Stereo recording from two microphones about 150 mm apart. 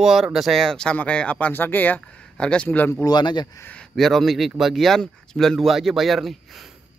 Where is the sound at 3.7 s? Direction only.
5° left (ahead or behind).